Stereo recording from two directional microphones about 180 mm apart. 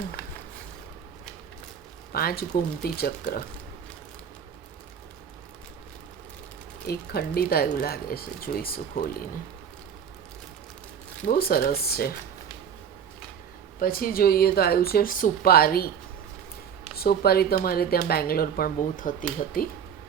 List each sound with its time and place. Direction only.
2.1 s speech: 55° left (ahead or behind)
6.8 s speech: 60° left (ahead or behind)
11.3 s speech: 55° left (ahead or behind)
13.7 s speech: 55° left (ahead or behind)
16.9 s speech: 60° left (ahead or behind)